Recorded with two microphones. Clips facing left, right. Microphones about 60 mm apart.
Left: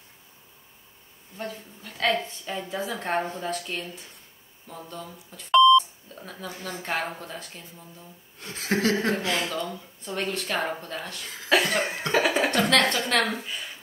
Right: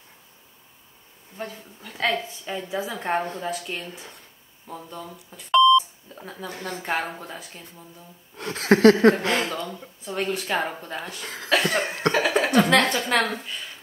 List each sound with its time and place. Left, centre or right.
1.4 s a woman's voice: centre
3.3 s cough: centre
4.7 s a woman's voice: centre
8.4 s speech: right
9.2 s speech: right
10.0 s a woman's voice: centre
11.4 s cough: centre
12.1 s speech: centre
12.4 s a woman's voice: centre
12.8 s cough: centre